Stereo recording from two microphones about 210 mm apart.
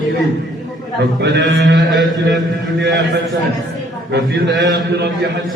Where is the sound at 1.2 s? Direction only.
55° right (ahead or behind).